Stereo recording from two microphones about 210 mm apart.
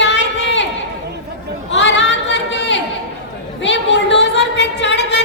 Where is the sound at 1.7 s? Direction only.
60° left (ahead or behind).